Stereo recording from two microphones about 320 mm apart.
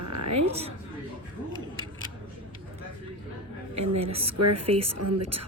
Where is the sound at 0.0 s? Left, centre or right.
Right.